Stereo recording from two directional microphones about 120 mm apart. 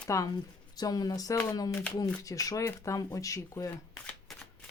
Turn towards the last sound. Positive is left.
turn(degrees=25)  # may be behind; listen again after turning